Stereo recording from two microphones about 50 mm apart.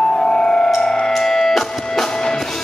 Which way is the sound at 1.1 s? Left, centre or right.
Centre.